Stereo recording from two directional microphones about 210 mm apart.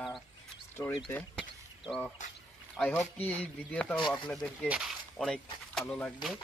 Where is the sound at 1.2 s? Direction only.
Centre (ahead or behind).